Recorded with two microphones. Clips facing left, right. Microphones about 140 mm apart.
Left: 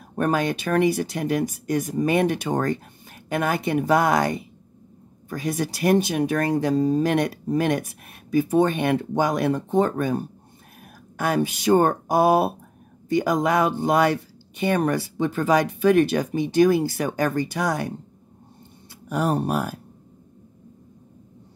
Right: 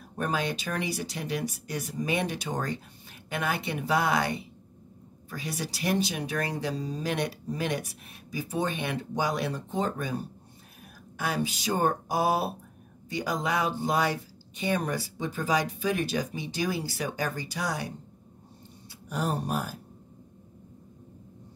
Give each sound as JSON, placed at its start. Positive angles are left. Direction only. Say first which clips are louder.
{"t": 0.1, "sound": "speech", "louder": "left 7 dB", "side_deg": 50}
{"t": 19.0, "sound": "speech", "louder": "left 7 dB", "side_deg": 60}